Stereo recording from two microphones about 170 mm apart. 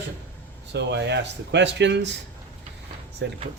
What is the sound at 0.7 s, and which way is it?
Speech, 90° right.